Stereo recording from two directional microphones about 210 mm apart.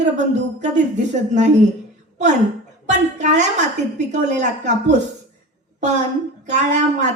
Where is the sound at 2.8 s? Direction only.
35° right (ahead or behind).